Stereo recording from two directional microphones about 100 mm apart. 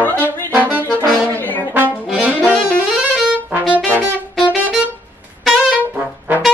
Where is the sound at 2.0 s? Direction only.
10° right (ahead or behind).